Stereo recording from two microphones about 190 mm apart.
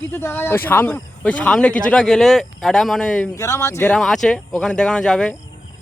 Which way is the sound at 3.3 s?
15° left (ahead or behind).